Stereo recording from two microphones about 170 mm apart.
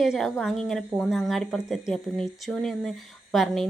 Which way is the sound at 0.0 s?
Centre (ahead or behind).